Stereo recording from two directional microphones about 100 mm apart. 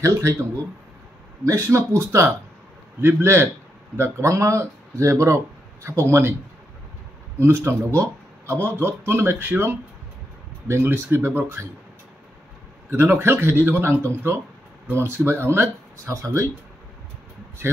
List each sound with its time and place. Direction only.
0.0 s speech: 30° right (ahead or behind)
3.0 s speech: 25° right (ahead or behind)
7.3 s speech: 30° right (ahead or behind)
12.9 s speech: 25° right (ahead or behind)